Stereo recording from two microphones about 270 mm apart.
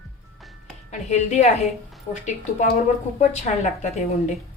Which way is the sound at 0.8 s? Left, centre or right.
Left.